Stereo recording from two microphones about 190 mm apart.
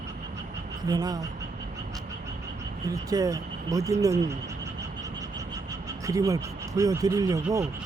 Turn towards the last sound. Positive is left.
turn(degrees=-20)  # may be behind; listen again after turning